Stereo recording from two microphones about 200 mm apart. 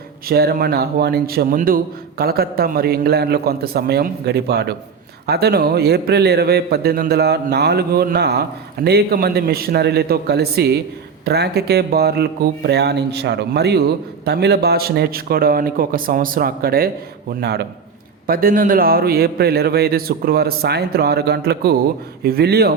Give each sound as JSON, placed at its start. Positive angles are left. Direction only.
{"t": 0.3, "sound": "a man's voice", "side_deg": -50}